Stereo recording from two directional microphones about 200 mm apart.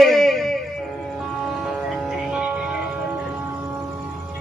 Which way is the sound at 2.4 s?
5° right (ahead or behind).